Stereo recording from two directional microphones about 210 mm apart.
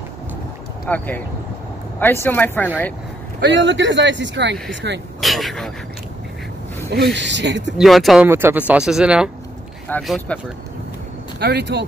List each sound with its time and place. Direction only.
0.8 s speech: 10° left (ahead or behind)
3.3 s speech: 55° right (ahead or behind)
5.2 s speech: centre (ahead or behind)
7.2 s speech: 55° right (ahead or behind)
7.7 s speech: centre (ahead or behind)
8.3 s speech: 10° right (ahead or behind)
11.3 s speech: 55° right (ahead or behind)